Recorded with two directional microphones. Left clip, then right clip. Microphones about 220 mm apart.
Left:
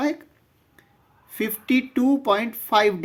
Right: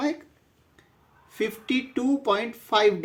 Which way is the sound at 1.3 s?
40° left (ahead or behind).